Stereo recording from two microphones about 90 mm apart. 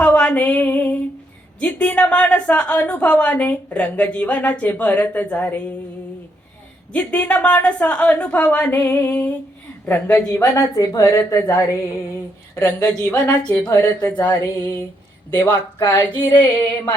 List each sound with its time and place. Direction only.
0.0 s a sound: 15° left (ahead or behind)
1.5 s a woman's voice: 15° left (ahead or behind)
6.9 s a woman's voice: 20° left (ahead or behind)
10.3 s a woman's voice: 35° left (ahead or behind)
12.5 s a woman's voice: 35° left (ahead or behind)
15.3 s a woman's voice: 20° left (ahead or behind)
15.8 s a woman's voice: 40° left (ahead or behind)